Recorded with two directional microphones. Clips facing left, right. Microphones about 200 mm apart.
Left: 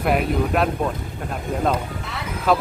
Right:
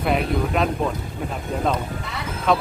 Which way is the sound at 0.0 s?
5° left (ahead or behind).